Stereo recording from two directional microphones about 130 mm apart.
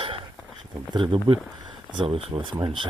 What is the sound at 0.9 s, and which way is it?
Speech, 40° right (ahead or behind).